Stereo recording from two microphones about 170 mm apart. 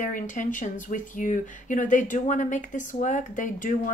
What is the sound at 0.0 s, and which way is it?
Speech, 50° left (ahead or behind).